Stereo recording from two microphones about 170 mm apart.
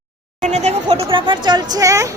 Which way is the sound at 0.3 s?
45° right (ahead or behind).